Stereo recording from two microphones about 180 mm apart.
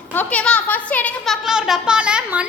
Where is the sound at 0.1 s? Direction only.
10° left (ahead or behind).